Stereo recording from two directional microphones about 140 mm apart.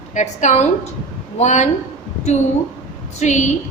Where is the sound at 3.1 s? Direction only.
55° left (ahead or behind).